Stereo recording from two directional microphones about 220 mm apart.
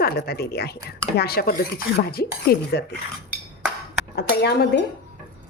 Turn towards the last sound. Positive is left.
turn(degrees=50)  # may be behind; listen again after turning